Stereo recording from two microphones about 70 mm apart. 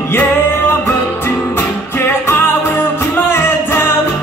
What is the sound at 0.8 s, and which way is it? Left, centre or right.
Music, left.